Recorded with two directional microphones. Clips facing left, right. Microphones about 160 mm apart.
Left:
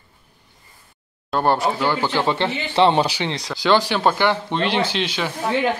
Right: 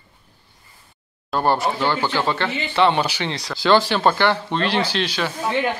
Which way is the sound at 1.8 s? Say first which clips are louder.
Left 1 dB; 15° left (ahead or behind).